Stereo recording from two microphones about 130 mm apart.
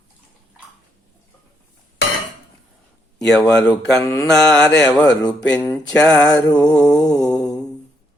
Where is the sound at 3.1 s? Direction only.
5° left (ahead or behind).